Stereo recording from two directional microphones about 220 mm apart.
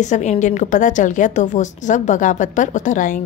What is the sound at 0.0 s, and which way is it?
Speech, 30° left (ahead or behind).